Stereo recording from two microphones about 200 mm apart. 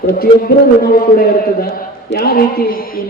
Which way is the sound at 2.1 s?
50° left (ahead or behind).